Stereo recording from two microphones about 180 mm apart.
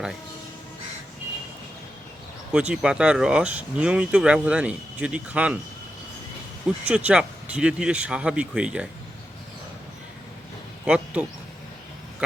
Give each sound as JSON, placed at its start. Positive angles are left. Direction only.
{"t": 2.5, "sound": "speech", "side_deg": -5}
{"t": 6.8, "sound": "speech", "side_deg": -5}
{"t": 10.8, "sound": "speech", "side_deg": -5}